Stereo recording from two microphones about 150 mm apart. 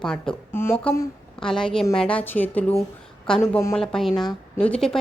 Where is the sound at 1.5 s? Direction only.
5° left (ahead or behind).